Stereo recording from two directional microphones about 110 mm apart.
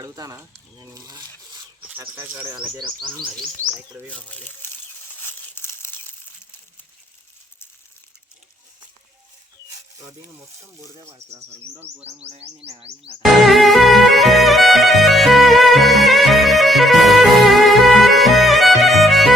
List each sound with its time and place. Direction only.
0.0 s speech: 30° right (ahead or behind)
2.2 s speech: 15° right (ahead or behind)
2.7 s speech: 45° right (ahead or behind)
4.1 s crumpling: 15° left (ahead or behind)
12.0 s bird: 70° right (ahead or behind)
12.6 s music: 65° right (ahead or behind)
13.2 s music: centre (ahead or behind)